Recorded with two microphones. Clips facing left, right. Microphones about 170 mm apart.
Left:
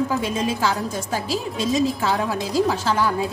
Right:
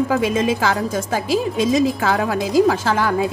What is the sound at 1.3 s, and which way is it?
A woman's voice, 50° right (ahead or behind).